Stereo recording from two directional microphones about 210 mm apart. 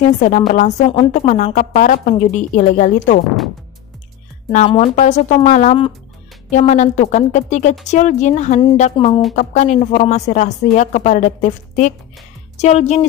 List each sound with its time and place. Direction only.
0.5 s a woman's voice: 35° left (ahead or behind)
4.5 s a woman's voice: 30° left (ahead or behind)